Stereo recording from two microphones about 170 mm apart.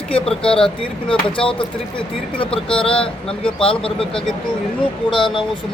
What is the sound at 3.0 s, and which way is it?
Speech, 30° left (ahead or behind).